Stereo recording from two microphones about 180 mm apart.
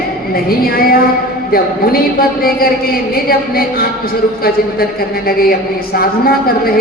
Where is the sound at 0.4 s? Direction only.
55° left (ahead or behind).